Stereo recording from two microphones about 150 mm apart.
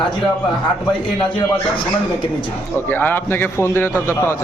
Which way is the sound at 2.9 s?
15° left (ahead or behind).